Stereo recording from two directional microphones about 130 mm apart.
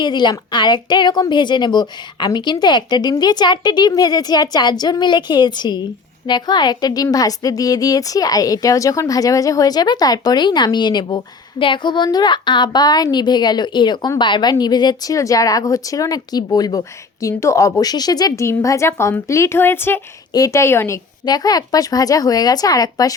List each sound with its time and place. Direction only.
0.0 s a woman's voice: 35° left (ahead or behind); by 21.0 s 20° left (ahead or behind)
21.2 s speech: 30° left (ahead or behind)